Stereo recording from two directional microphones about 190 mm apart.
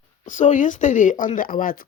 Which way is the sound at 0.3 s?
40° left (ahead or behind).